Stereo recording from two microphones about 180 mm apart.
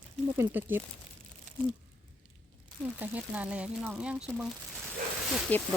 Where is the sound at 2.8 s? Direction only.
10° right (ahead or behind).